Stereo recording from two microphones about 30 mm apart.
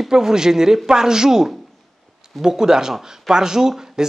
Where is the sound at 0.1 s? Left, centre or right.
Right.